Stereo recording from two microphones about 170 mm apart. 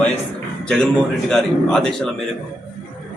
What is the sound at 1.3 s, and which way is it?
Speech, 5° left (ahead or behind).